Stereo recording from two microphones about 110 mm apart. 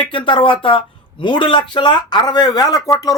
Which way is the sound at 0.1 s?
50° left (ahead or behind).